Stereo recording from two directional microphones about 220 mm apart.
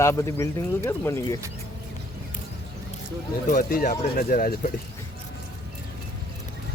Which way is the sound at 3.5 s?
40° left (ahead or behind).